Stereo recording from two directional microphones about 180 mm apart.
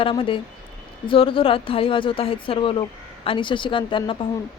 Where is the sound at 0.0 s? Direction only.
30° left (ahead or behind).